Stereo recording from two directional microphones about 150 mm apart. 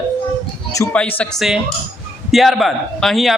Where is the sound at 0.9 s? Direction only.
10° left (ahead or behind).